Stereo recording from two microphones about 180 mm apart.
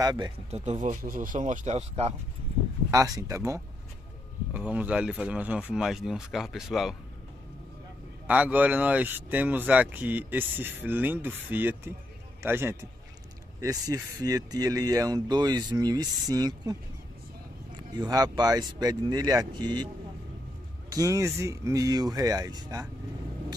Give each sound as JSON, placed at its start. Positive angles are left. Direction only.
{"t": 0.0, "sound": "speech", "side_deg": -20}
{"t": 0.5, "sound": "speech", "side_deg": -40}
{"t": 2.9, "sound": "speech", "side_deg": -20}
{"t": 8.3, "sound": "speech", "side_deg": -10}
{"t": 17.7, "sound": "speech", "side_deg": -20}
{"t": 20.9, "sound": "speech", "side_deg": -20}